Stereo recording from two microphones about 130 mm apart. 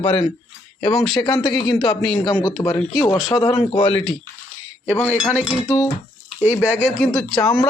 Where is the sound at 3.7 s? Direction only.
45° left (ahead or behind).